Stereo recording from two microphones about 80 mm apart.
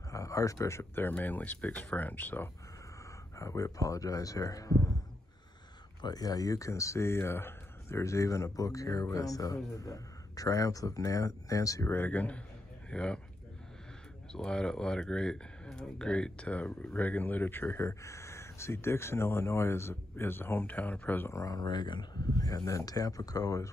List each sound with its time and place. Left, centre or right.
0.1 s speech: left
3.3 s speech: left
5.9 s speech: left
11.9 s speech: left
14.3 s speech: centre
21.3 s speech: left
21.5 s speech: left
22.4 s speech: left